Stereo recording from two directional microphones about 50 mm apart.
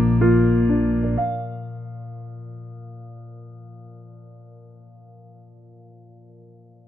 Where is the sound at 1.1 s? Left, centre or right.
Right.